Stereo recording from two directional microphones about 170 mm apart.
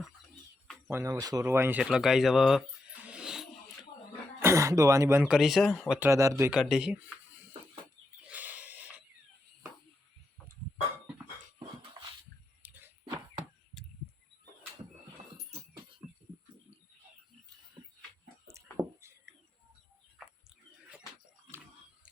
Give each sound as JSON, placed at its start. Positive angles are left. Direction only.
{"t": 0.9, "sound": "speech", "side_deg": -15}
{"t": 1.8, "sound": "a sound", "side_deg": -5}
{"t": 4.4, "sound": "speech", "side_deg": -15}
{"t": 5.3, "sound": "speech", "side_deg": 0}
{"t": 6.0, "sound": "speech", "side_deg": -20}
{"t": 6.5, "sound": "speech", "side_deg": -5}
{"t": 8.3, "sound": "wild animals", "side_deg": -10}
{"t": 12.6, "sound": "a sound", "side_deg": -10}
{"t": 17.8, "sound": "pig", "side_deg": -25}
{"t": 18.4, "sound": "a sound", "side_deg": -15}